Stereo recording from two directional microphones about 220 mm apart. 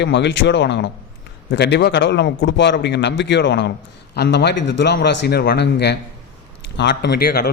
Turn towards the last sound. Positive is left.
turn(degrees=45)  # may be behind; listen again after turning